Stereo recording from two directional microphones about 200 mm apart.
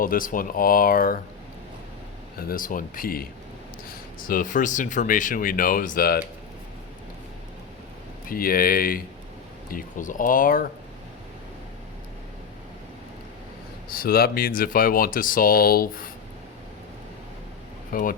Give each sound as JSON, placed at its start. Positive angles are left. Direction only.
{"t": 0.0, "sound": "speech", "side_deg": 45}
{"t": 2.5, "sound": "speech", "side_deg": 45}
{"t": 8.3, "sound": "speech", "side_deg": 45}
{"t": 13.9, "sound": "speech", "side_deg": 45}
{"t": 17.9, "sound": "speech", "side_deg": 45}